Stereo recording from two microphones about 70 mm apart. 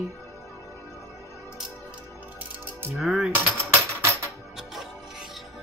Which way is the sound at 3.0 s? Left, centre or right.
Centre.